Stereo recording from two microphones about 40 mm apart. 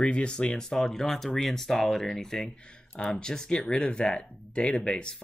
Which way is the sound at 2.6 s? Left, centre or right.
Left.